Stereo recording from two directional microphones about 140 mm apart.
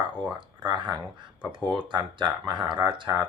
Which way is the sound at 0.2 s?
35° right (ahead or behind).